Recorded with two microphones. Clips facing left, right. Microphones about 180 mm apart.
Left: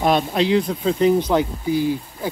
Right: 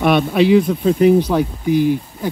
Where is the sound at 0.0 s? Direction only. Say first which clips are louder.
Right 4 dB; 60° right (ahead or behind).